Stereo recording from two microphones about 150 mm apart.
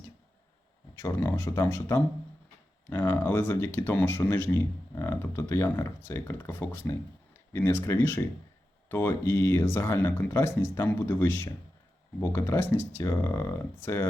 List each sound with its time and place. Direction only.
0.9 s speech: 15° left (ahead or behind)